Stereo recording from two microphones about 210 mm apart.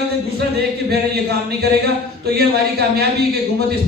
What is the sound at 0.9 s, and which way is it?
A man's voice, 50° right (ahead or behind).